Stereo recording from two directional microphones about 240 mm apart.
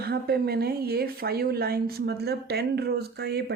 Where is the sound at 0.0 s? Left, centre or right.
Right.